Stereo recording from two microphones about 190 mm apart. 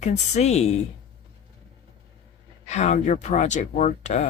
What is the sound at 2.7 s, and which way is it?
Speech, 35° left (ahead or behind).